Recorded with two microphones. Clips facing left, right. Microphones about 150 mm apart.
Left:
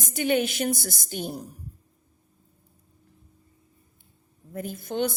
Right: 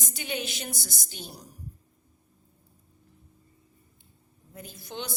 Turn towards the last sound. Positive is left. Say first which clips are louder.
# left 11 dB
turn(degrees=55)  # may be behind; listen again after turning